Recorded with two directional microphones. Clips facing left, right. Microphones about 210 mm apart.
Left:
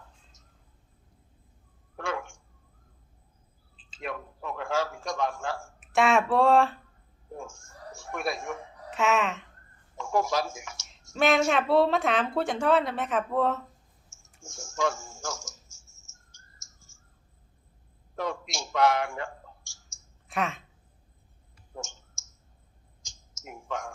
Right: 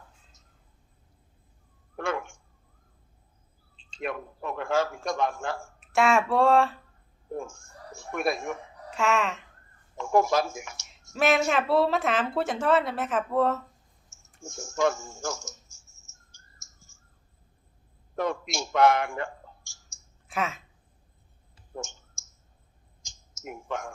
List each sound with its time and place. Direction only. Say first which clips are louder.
2.0 s a sound: right 3 dB; 60° right (ahead or behind)
3.8 s a sound: right 6 dB; 5° left (ahead or behind)
4.0 s a man's voice: right 3 dB; 60° right (ahead or behind)
5.8 s speech: even; centre (ahead or behind)
8.2 s speech: right 4 dB; 55° right (ahead or behind)
8.9 s speech: even; centre (ahead or behind)
10.0 s speech: right 4 dB; 55° right (ahead or behind)
11.1 s a woman's voice: even; centre (ahead or behind)
14.4 s speech: right 4 dB; 60° right (ahead or behind)
16.9 s clicking: left 1 dB; 60° right (ahead or behind)
18.2 s a man's voice: right 4 dB; 55° right (ahead or behind)
20.2 s speech: even; centre (ahead or behind)
21.8 s clicking: right 3 dB; 60° right (ahead or behind)
23.0 s a sound: right 5 dB; 60° right (ahead or behind)